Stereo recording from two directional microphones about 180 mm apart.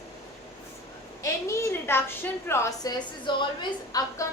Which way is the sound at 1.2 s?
15° left (ahead or behind).